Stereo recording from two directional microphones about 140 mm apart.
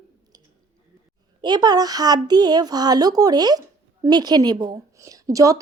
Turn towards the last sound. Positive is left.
turn(degrees=-25)  # may be behind; listen again after turning